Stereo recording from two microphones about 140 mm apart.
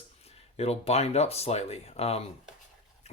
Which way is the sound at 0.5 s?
50° left (ahead or behind).